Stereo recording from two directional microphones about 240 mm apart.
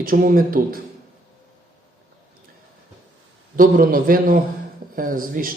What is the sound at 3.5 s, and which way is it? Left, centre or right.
A man's voice, right.